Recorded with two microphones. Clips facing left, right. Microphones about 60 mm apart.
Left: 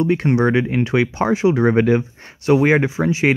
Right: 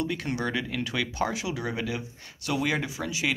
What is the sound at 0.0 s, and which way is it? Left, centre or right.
Speech, left.